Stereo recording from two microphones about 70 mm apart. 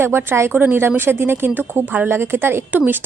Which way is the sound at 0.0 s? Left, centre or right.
Right.